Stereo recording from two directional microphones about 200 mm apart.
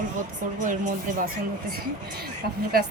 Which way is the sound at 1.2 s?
50° right (ahead or behind).